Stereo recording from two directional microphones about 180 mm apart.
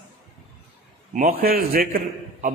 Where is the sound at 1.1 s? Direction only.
50° right (ahead or behind).